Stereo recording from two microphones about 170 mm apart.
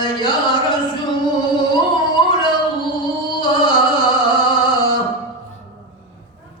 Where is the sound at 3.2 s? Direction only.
25° left (ahead or behind).